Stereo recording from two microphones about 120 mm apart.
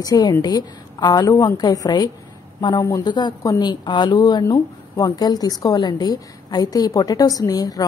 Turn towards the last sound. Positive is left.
turn(degrees=30)  # may be behind; listen again after turning